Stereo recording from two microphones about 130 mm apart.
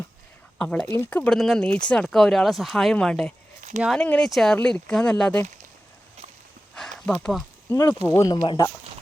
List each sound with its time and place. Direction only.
0.6 s speech: 5° left (ahead or behind)
4.0 s speech: 10° left (ahead or behind)
6.7 s a sound: 5° left (ahead or behind)
7.7 s speech: 20° left (ahead or behind)